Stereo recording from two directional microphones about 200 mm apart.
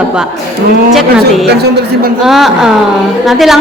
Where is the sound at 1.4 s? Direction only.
55° right (ahead or behind).